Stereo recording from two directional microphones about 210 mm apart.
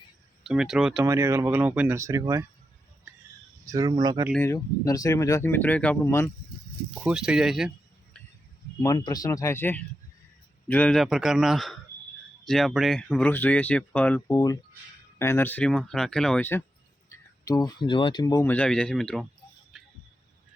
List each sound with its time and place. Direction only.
0.4 s speech: 5° right (ahead or behind)
1.0 s speech: 15° right (ahead or behind)
3.7 s speech: 15° right (ahead or behind)
4.3 s speech: 10° left (ahead or behind)
7.0 s speech: 5° right (ahead or behind)
8.8 s speech: 20° left (ahead or behind); by 19.3 s centre (ahead or behind)
19.7 s a sound: centre (ahead or behind)